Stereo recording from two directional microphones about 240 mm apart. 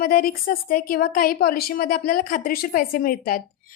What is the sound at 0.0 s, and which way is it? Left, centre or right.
A woman's voice, left.